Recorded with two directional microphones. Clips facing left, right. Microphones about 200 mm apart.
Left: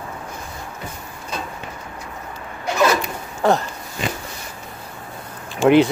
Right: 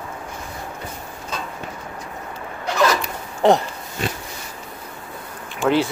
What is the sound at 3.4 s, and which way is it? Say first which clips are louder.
Speech: right 2 dB; 20° right (ahead or behind).